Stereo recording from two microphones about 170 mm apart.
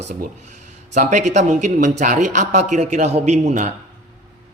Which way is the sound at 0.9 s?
45° right (ahead or behind).